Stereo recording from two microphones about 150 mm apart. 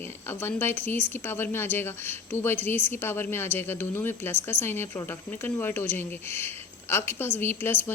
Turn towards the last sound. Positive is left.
turn(degrees=15)  # may be behind; listen again after turning